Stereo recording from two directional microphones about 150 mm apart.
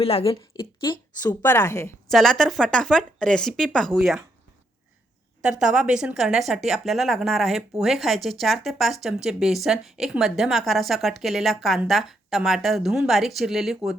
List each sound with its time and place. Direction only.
0.0 s a woman's voice: 40° left (ahead or behind)
1.4 s a woman's voice: 15° left (ahead or behind)
2.0 s speech: centre (ahead or behind)
5.4 s speech: 5° right (ahead or behind)